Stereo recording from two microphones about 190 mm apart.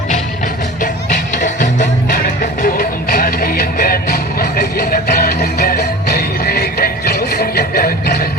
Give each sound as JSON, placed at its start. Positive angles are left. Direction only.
{"t": 1.3, "sound": "music", "side_deg": 40}